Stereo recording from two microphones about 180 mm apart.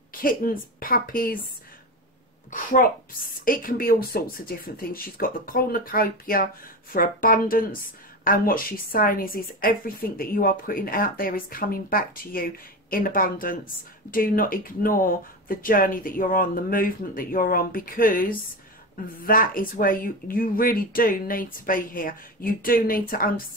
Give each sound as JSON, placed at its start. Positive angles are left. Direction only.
{"t": 0.1, "sound": "a woman's voice", "side_deg": 55}
{"t": 2.5, "sound": "a woman's voice", "side_deg": 45}